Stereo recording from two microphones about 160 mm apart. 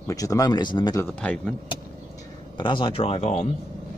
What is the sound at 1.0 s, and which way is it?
Speech, 10° left (ahead or behind).